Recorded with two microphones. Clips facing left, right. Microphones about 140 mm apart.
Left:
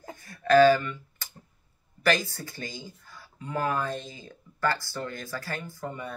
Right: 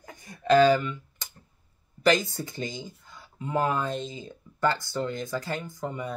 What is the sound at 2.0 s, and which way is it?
Speech, 20° right (ahead or behind).